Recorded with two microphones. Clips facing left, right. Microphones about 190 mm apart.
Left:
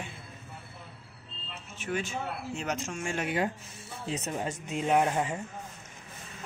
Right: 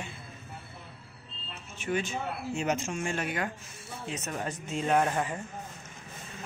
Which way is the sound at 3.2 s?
20° left (ahead or behind).